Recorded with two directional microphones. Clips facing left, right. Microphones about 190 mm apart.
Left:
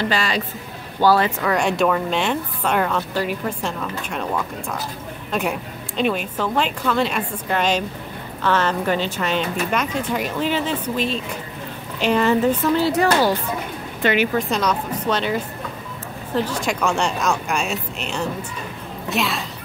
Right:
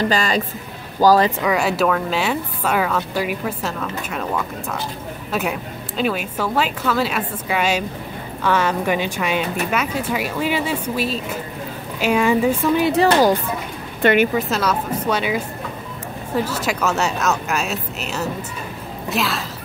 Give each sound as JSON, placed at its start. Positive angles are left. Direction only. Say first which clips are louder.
{"t": 0.0, "sound": "speech", "louder": "right 3 dB", "side_deg": -45}
{"t": 1.4, "sound": "a woman's voice", "louder": "right 1 dB", "side_deg": -5}
{"t": 14.0, "sound": "speech", "louder": "right 4 dB", "side_deg": -50}
{"t": 14.3, "sound": "a woman's voice", "louder": "right 1 dB", "side_deg": -5}